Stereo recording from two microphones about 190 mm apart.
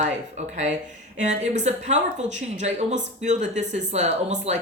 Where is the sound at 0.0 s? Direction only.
40° right (ahead or behind).